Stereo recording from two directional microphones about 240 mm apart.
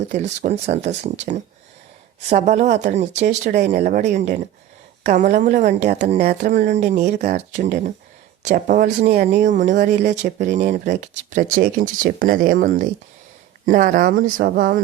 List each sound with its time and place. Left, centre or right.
0.1 s speech: right